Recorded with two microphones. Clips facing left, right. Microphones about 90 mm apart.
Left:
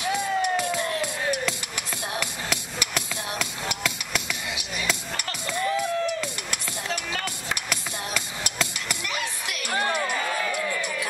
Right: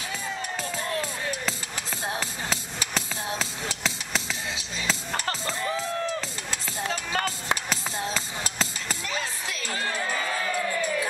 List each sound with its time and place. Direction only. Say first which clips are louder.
0.1 s music: left 10 dB; 90° left
1.0 s music: left 4 dB; 30° right (ahead or behind)
7.1 s chop: right 3 dB; 35° right (ahead or behind)
7.7 s a sound: right 1 dB; 30° right (ahead or behind)